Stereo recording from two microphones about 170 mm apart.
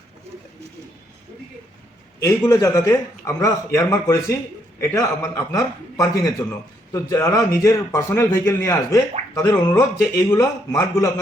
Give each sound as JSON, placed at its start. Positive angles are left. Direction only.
{"t": 2.2, "sound": "a man's voice", "side_deg": 20}